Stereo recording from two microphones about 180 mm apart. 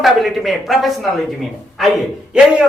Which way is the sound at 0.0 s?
Centre (ahead or behind).